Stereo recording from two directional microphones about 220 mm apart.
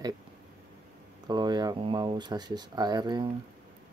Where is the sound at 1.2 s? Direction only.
20° right (ahead or behind).